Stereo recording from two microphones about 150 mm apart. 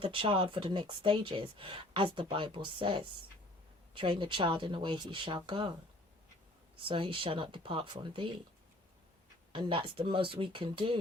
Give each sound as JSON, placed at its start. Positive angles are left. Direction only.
{"t": 0.0, "sound": "speech", "side_deg": -35}
{"t": 6.7, "sound": "speech", "side_deg": -35}
{"t": 9.5, "sound": "speech", "side_deg": -35}